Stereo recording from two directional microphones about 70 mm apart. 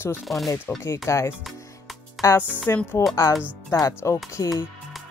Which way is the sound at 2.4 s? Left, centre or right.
Left.